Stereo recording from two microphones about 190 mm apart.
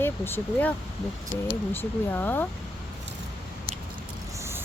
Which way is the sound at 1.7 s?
10° left (ahead or behind).